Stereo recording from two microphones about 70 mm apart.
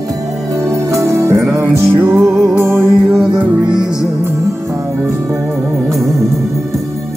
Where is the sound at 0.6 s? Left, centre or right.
Right.